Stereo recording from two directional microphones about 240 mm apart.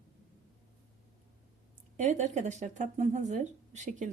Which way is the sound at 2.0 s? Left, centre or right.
Right.